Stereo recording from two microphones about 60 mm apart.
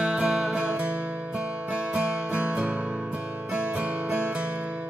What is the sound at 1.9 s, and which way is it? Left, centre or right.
Music, right.